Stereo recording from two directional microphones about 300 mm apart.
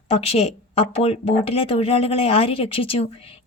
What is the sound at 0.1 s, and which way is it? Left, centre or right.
A woman's voice, centre.